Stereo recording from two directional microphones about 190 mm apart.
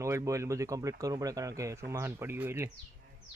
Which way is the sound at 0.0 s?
15° right (ahead or behind).